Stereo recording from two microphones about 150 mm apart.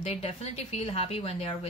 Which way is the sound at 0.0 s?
45° left (ahead or behind).